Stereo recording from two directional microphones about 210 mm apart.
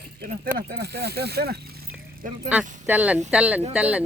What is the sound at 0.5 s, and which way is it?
Speech, 50° right (ahead or behind).